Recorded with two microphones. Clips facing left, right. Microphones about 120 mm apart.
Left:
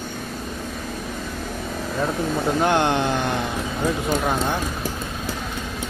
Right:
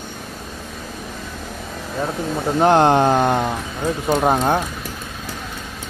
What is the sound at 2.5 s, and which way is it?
Speech, 35° right (ahead or behind).